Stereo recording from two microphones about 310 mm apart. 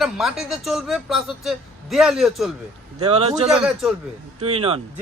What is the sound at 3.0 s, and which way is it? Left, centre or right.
Speech, centre.